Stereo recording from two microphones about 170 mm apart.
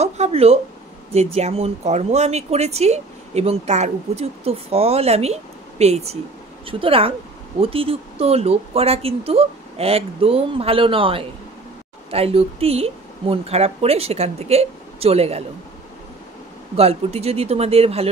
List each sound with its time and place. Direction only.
0.0 s a sound: 40° right (ahead or behind)
1.1 s speech: 40° right (ahead or behind)
16.7 s speech: 35° right (ahead or behind)